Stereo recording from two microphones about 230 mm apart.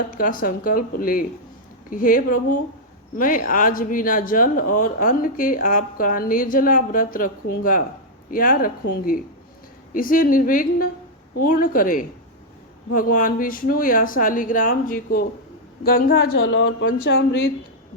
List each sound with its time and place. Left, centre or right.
0.2 s a woman's voice: left
16.4 s speech: left